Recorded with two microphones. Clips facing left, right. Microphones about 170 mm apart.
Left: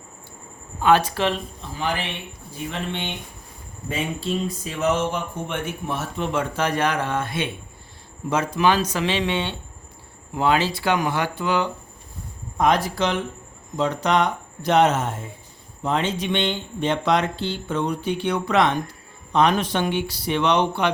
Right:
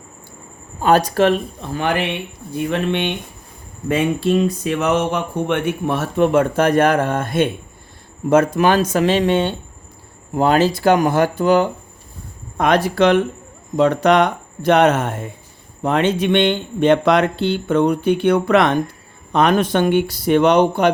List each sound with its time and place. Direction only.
0.8 s speech: 40° right (ahead or behind)
12.5 s speech: 70° right (ahead or behind); by 20.9 s 45° right (ahead or behind)